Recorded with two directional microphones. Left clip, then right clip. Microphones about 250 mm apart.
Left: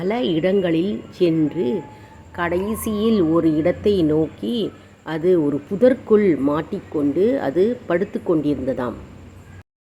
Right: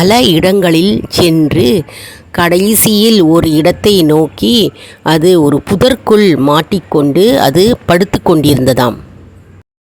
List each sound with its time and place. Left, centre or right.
0.0 s speech: right